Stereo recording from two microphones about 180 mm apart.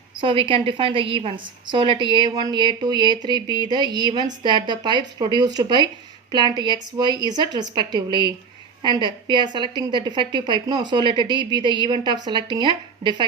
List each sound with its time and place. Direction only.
0.2 s a woman's voice: 30° right (ahead or behind)